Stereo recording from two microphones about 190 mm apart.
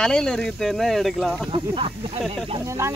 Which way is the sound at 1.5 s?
30° right (ahead or behind).